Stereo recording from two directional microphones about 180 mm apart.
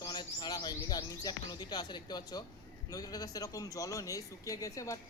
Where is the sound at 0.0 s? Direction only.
25° left (ahead or behind).